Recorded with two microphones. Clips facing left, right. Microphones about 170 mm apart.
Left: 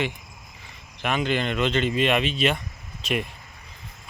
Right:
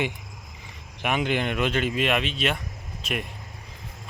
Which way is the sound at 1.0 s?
15° right (ahead or behind).